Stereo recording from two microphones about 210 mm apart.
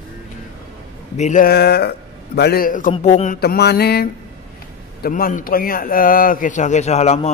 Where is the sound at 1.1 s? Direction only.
35° left (ahead or behind).